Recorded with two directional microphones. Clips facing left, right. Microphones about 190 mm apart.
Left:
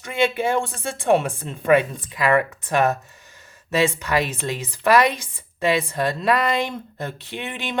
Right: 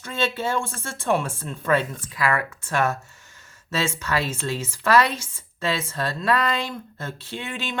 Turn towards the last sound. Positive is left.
turn(degrees=15)  # may be behind; listen again after turning